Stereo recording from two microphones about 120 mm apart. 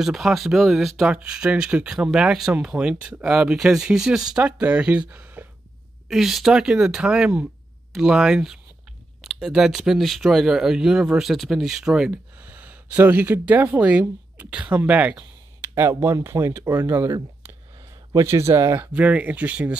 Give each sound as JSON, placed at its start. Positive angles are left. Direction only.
{"t": 0.0, "sound": "speech", "side_deg": -5}
{"t": 6.0, "sound": "speech", "side_deg": 0}
{"t": 18.9, "sound": "speech", "side_deg": -10}